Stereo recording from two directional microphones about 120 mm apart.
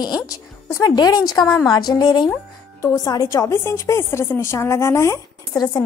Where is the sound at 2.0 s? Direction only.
35° left (ahead or behind).